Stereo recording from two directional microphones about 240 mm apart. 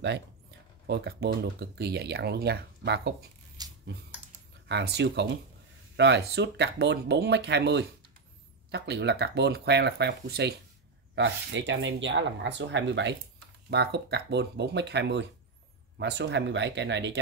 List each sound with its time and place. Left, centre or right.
0.8 s speech: right
3.6 s a sound: centre
4.6 s speech: right